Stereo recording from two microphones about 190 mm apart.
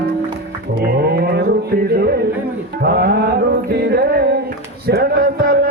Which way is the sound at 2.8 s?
55° right (ahead or behind).